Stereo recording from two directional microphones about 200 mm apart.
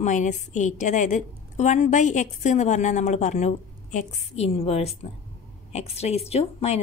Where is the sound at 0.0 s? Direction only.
35° left (ahead or behind).